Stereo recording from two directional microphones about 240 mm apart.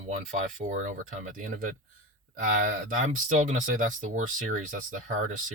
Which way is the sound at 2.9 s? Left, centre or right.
Right.